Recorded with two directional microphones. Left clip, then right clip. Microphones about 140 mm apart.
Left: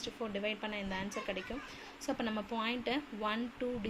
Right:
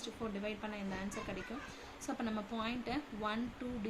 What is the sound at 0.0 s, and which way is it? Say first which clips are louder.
Speech: left 4 dB; 25° left (ahead or behind).